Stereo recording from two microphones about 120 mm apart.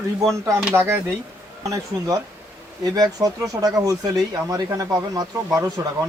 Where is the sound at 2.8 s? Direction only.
30° right (ahead or behind).